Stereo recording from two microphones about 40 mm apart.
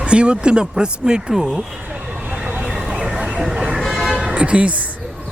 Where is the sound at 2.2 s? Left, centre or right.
Right.